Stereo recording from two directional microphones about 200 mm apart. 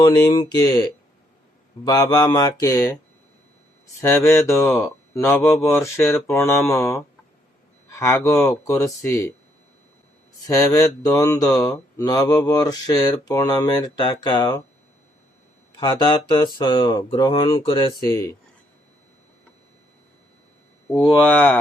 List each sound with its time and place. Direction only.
0.0 s speech: 20° left (ahead or behind)
1.9 s speech: 20° left (ahead or behind)
4.0 s speech: 15° left (ahead or behind)
10.4 s speech: 15° left (ahead or behind)
15.7 s speech: 25° left (ahead or behind)
20.9 s speech: 10° left (ahead or behind)